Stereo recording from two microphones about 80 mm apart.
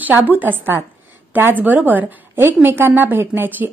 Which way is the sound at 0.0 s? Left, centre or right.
Right.